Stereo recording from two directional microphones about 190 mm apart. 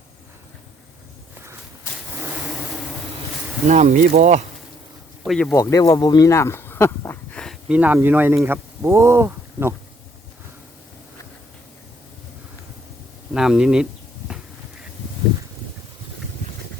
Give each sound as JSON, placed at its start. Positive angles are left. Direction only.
{"t": 2.1, "sound": "vehicle", "side_deg": -10}
{"t": 3.7, "sound": "speech", "side_deg": -40}
{"t": 5.2, "sound": "speech", "side_deg": 0}
{"t": 5.5, "sound": "speech", "side_deg": 15}
{"t": 7.7, "sound": "speech", "side_deg": -10}
{"t": 13.3, "sound": "speech", "side_deg": -5}